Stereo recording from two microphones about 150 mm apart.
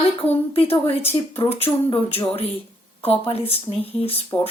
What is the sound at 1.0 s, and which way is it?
Speech, 15° left (ahead or behind).